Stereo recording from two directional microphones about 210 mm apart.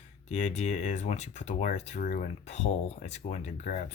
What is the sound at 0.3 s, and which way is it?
Speech, 35° left (ahead or behind).